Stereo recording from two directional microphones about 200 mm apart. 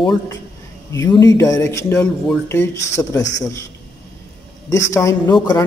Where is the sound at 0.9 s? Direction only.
20° left (ahead or behind).